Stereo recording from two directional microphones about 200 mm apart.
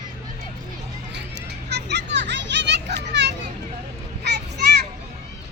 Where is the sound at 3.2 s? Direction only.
60° right (ahead or behind).